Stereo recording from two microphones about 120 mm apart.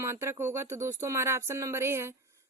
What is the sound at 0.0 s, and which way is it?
Speech, 25° right (ahead or behind).